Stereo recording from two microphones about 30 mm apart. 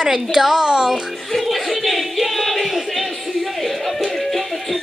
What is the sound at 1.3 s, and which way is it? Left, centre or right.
Speech, centre.